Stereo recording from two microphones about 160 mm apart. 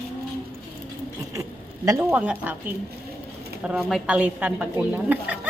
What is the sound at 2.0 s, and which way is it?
Speech, 10° right (ahead or behind).